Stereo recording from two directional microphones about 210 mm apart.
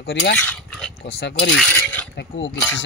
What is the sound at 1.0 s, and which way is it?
Speech, 55° left (ahead or behind).